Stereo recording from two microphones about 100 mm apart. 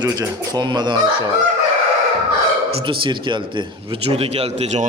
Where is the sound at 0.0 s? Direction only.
40° right (ahead or behind).